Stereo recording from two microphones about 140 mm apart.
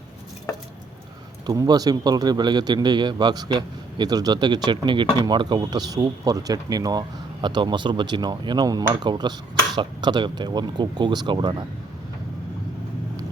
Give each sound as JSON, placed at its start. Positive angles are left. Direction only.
{"t": 1.5, "sound": "a man's voice", "side_deg": -30}